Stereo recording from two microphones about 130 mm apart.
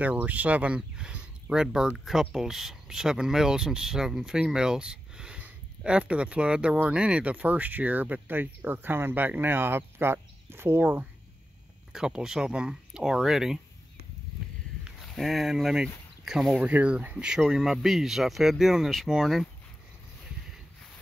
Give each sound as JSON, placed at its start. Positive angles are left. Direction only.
{"t": 0.0, "sound": "speech", "side_deg": -10}
{"t": 11.9, "sound": "speech", "side_deg": -5}
{"t": 14.9, "sound": "speech", "side_deg": 0}